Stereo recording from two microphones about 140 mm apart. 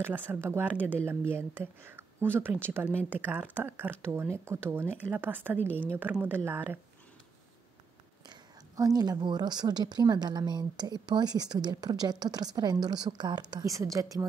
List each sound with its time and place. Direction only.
0.0 s speech: 15° right (ahead or behind)
8.3 s a woman's voice: 25° right (ahead or behind)